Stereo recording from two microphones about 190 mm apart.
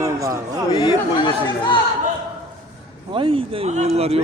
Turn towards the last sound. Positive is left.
turn(degrees=-35)  # may be behind; listen again after turning